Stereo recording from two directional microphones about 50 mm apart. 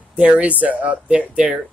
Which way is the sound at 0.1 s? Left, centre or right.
Right.